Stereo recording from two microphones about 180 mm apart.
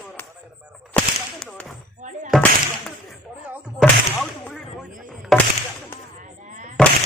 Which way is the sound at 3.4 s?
10° right (ahead or behind).